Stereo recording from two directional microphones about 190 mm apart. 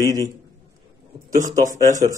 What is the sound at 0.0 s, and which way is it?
Speech, 20° right (ahead or behind).